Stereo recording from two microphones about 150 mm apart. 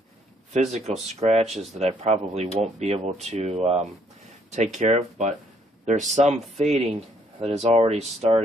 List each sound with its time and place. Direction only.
0.5 s speech: 50° right (ahead or behind)